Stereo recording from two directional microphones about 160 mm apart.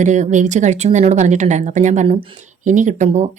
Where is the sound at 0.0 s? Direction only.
50° right (ahead or behind).